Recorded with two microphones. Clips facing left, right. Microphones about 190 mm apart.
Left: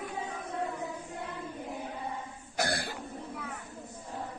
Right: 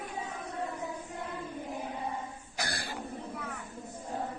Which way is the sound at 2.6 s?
60° left (ahead or behind).